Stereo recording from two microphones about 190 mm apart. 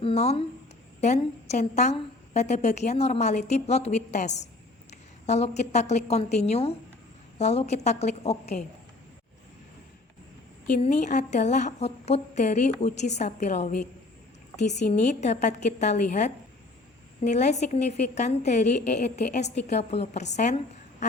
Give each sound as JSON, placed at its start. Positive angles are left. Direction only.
{"t": 0.0, "sound": "a woman's voice", "side_deg": 35}
{"t": 10.8, "sound": "a woman's voice", "side_deg": 40}
{"t": 15.0, "sound": "a woman's voice", "side_deg": 40}